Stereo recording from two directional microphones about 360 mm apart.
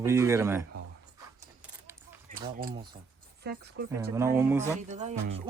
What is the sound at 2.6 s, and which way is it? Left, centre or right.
Speech, right.